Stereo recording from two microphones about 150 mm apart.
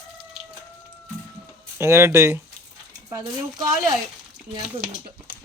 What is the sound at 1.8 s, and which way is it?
Speech, 15° right (ahead or behind).